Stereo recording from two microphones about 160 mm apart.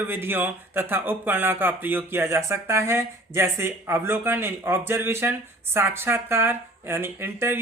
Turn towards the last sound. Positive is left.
turn(degrees=-15)  # may be behind; listen again after turning